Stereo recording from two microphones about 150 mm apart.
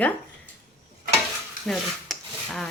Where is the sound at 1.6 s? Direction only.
Centre (ahead or behind).